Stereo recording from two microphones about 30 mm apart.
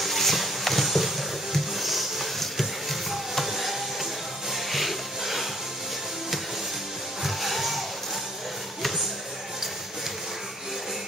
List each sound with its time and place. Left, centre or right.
0.0 s music: centre
7.2 s music: centre